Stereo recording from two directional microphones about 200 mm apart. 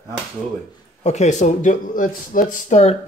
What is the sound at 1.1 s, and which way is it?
Speech, 35° left (ahead or behind).